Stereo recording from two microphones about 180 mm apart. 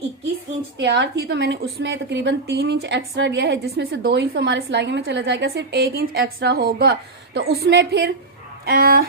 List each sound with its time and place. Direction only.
0.8 s a woman's voice: 75° right (ahead or behind)
8.6 s a woman's voice: 55° right (ahead or behind)